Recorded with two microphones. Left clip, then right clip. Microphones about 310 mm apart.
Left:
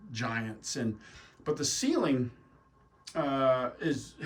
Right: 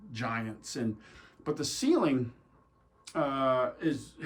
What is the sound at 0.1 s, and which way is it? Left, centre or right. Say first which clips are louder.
Speech: even; centre.